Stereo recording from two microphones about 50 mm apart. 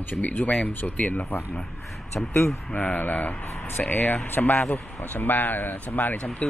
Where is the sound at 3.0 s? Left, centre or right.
Left.